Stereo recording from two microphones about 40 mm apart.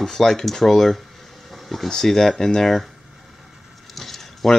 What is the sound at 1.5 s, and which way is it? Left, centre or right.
Vehicle, centre.